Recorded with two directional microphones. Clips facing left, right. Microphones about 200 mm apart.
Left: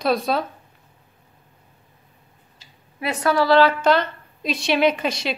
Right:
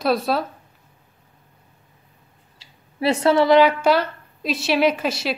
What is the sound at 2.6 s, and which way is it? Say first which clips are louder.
A woman's voice: right 7 dB; 30° right (ahead or behind).